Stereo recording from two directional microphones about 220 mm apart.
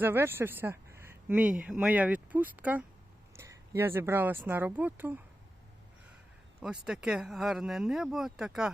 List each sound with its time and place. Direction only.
0.0 s speech: 10° right (ahead or behind)
6.6 s speech: 5° right (ahead or behind)